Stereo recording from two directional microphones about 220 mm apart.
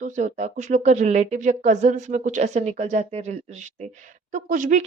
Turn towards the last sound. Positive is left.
turn(degrees=-35)  # may be behind; listen again after turning